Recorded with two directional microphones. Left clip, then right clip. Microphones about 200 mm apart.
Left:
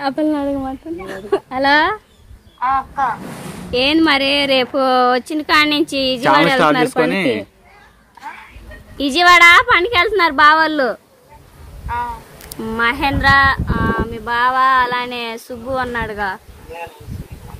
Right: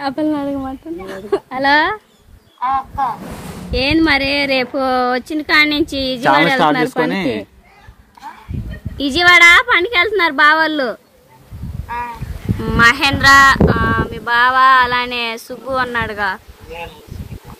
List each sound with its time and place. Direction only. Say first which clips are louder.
0.0 s speech: left 1 dB; 10° left (ahead or behind)
2.6 s speech: left 1 dB; centre (ahead or behind)
3.7 s speech: even; 15° left (ahead or behind)
7.1 s a woman's voice: left 2 dB; 5° right (ahead or behind)
8.2 s a sound: left 2 dB; 5° left (ahead or behind)
8.9 s speech: even; 15° left (ahead or behind)
12.6 s speech: right 5 dB; 20° left (ahead or behind)